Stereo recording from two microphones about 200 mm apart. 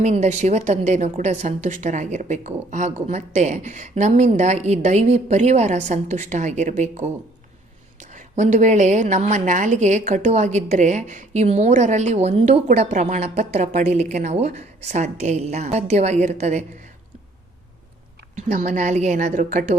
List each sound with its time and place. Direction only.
0.0 s a woman's voice: 35° right (ahead or behind)
8.1 s a woman's voice: 35° right (ahead or behind)
18.3 s a woman's voice: 35° right (ahead or behind)